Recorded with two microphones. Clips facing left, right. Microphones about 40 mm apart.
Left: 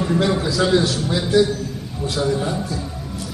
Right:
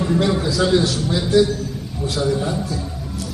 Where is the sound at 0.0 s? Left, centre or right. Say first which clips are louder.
Even; centre.